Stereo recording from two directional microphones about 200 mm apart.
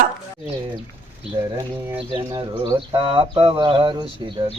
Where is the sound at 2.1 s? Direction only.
20° right (ahead or behind).